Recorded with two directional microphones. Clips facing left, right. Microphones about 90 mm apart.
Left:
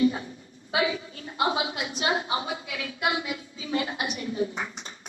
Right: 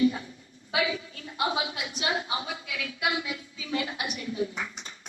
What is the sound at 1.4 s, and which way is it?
A woman's voice, 30° left (ahead or behind).